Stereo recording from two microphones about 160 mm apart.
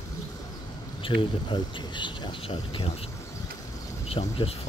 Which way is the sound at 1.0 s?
30° left (ahead or behind).